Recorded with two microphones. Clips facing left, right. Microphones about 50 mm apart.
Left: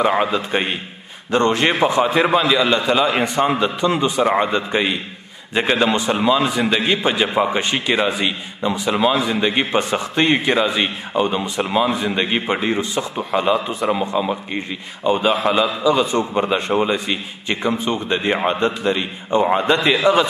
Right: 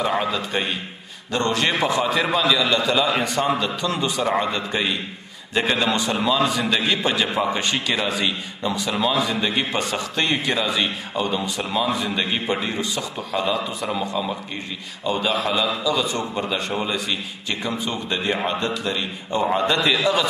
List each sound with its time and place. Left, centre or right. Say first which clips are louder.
0.0 s a man's voice: left 5 dB; left